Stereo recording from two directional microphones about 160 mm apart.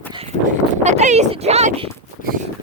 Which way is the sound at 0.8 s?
45° right (ahead or behind).